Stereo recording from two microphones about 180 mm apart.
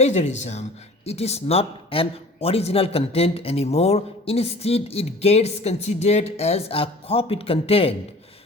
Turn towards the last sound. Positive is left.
turn(degrees=30)  # may be behind; listen again after turning